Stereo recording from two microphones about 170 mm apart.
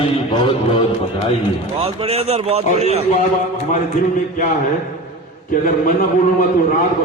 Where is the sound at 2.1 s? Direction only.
35° right (ahead or behind).